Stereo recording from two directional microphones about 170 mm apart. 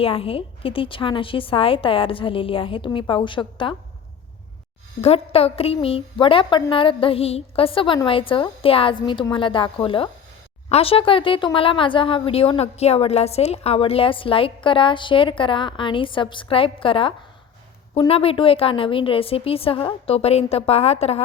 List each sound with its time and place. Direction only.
0.0 s speech: 35° left (ahead or behind)
4.9 s speech: 35° left (ahead or behind)